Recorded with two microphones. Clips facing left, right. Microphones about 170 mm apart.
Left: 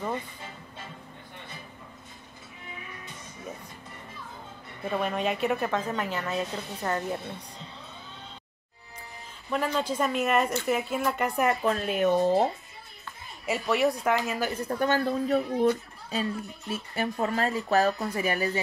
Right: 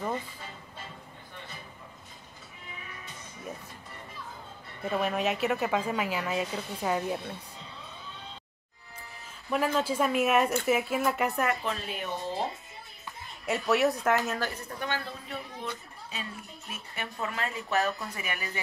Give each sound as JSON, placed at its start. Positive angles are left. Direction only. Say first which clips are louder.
{"t": 4.8, "sound": "a woman's voice", "louder": "even", "side_deg": -5}
{"t": 9.5, "sound": "speech", "louder": "even", "side_deg": -5}
{"t": 11.6, "sound": "speech", "louder": "left 10 dB", "side_deg": 50}
{"t": 13.5, "sound": "speech", "louder": "even", "side_deg": 0}
{"t": 14.7, "sound": "speech", "louder": "left 9 dB", "side_deg": 45}